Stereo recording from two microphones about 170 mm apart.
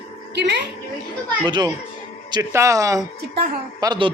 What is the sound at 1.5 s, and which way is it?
A man's voice, 25° right (ahead or behind).